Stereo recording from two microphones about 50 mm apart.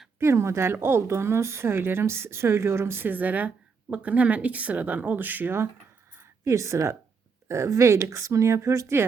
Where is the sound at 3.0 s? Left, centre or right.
Right.